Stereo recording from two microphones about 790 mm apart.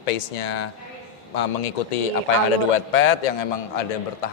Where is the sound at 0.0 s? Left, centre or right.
Left.